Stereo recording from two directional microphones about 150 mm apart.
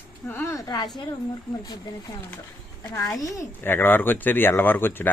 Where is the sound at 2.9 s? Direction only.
20° left (ahead or behind).